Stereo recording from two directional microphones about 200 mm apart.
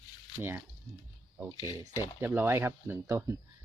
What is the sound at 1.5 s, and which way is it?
Speech, 20° left (ahead or behind).